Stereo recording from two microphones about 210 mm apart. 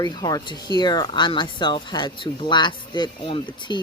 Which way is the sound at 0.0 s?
20° left (ahead or behind).